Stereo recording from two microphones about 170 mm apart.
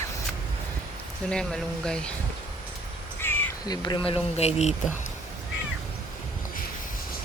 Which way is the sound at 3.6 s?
25° left (ahead or behind).